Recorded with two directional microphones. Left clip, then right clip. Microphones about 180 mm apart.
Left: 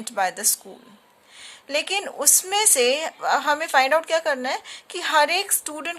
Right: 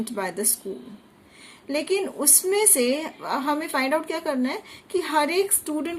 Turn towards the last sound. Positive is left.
turn(degrees=45)  # may be behind; listen again after turning